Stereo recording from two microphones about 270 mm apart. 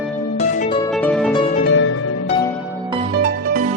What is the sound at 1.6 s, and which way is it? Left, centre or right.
Music, left.